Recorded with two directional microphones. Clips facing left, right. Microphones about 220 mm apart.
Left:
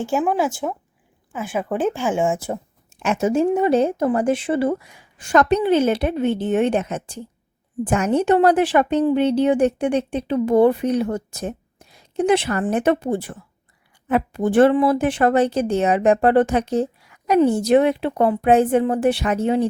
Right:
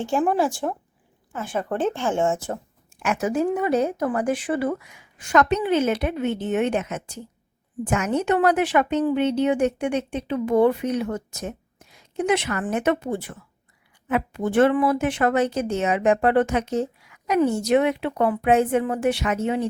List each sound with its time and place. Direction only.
0.0 s speech: 5° left (ahead or behind)
2.9 s a woman's voice: 25° left (ahead or behind)